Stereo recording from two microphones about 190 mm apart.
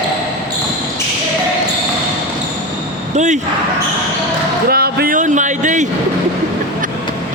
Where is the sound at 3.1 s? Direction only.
40° right (ahead or behind).